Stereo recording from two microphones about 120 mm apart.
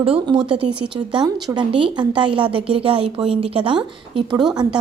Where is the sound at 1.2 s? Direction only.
30° right (ahead or behind).